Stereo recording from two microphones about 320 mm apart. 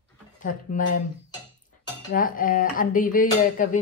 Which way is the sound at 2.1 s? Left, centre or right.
Left.